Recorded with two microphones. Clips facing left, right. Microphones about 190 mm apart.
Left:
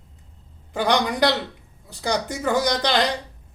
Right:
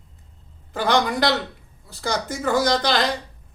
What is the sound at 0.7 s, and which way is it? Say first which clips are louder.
Speech: right 1 dB; 15° left (ahead or behind).